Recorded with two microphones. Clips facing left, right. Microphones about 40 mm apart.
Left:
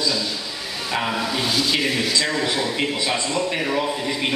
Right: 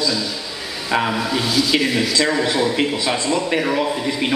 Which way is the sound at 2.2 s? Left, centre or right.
Centre.